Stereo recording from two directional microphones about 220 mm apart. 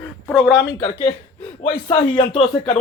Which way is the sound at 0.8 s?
25° left (ahead or behind).